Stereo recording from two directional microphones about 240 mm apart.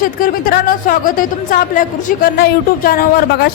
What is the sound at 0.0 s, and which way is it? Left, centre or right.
Speech, left.